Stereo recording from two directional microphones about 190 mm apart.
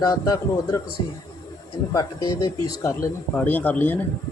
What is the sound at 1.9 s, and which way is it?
Speech, 20° left (ahead or behind).